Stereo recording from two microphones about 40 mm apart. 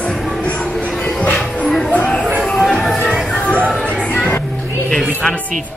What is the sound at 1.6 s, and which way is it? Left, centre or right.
Music, centre.